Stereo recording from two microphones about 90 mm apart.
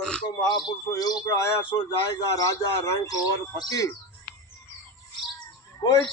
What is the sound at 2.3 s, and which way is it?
A man's voice, 35° left (ahead or behind).